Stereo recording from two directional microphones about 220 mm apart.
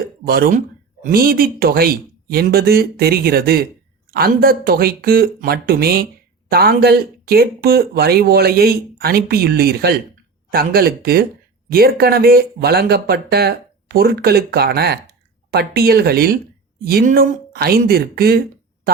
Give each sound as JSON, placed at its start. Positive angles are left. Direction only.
{"t": 0.3, "sound": "speech", "side_deg": -45}